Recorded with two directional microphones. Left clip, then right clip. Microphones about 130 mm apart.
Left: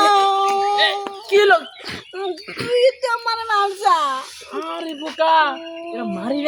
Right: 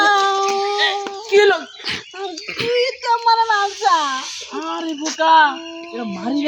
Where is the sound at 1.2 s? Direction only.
35° left (ahead or behind).